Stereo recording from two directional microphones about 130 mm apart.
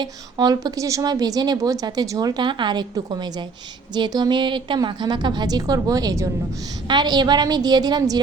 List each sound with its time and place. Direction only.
0.0 s a woman's voice: 30° right (ahead or behind)